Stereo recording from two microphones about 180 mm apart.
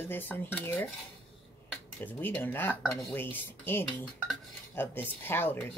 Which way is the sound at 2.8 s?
Centre (ahead or behind).